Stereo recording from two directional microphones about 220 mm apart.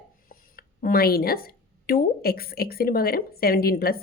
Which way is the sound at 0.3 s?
40° left (ahead or behind).